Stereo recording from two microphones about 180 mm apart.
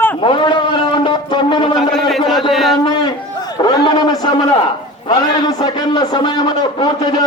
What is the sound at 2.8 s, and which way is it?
Speech, 25° left (ahead or behind).